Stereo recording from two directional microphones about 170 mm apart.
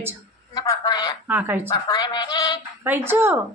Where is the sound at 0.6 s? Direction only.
25° left (ahead or behind).